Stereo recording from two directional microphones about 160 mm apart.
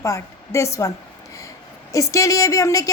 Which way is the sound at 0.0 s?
20° left (ahead or behind).